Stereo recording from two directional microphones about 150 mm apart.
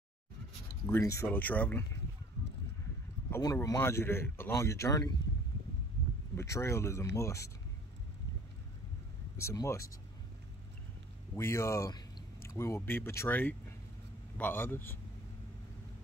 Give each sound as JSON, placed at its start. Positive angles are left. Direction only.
{"t": 0.8, "sound": "speech", "side_deg": 15}
{"t": 3.3, "sound": "speech", "side_deg": 15}
{"t": 6.3, "sound": "speech", "side_deg": 20}
{"t": 9.4, "sound": "speech", "side_deg": 20}
{"t": 11.3, "sound": "speech", "side_deg": 20}